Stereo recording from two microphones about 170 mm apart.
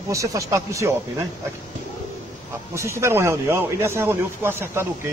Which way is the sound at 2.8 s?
15° right (ahead or behind).